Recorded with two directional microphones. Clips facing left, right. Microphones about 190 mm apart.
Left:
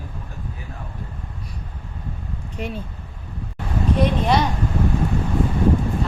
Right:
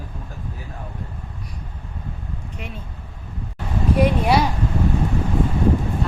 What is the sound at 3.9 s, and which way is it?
Speech, 10° right (ahead or behind).